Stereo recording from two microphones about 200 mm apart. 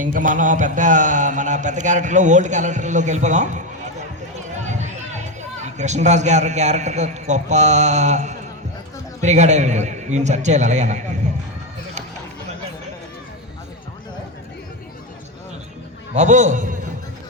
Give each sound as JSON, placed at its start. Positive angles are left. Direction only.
{"t": 0.0, "sound": "a man's voice", "side_deg": -40}
{"t": 16.1, "sound": "a man's voice", "side_deg": -35}